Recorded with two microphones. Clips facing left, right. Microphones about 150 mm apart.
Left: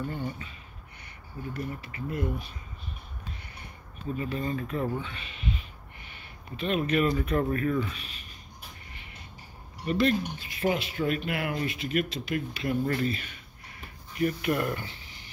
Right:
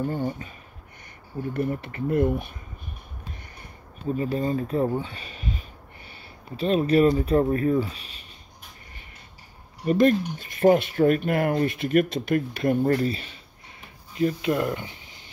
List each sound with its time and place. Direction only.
0.0 s speech: 40° right (ahead or behind)
1.5 s speech: 55° right (ahead or behind)
4.2 s speech: 35° right (ahead or behind)
9.8 s speech: 45° right (ahead or behind); by 13.4 s 30° right (ahead or behind)
14.1 s speech: 20° right (ahead or behind)